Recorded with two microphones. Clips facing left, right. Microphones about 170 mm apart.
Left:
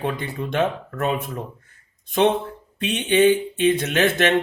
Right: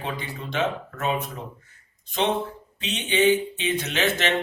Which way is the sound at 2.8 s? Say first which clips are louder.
Left 5 dB; 55° left (ahead or behind).